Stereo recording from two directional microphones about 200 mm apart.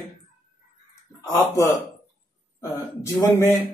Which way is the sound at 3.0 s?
15° left (ahead or behind).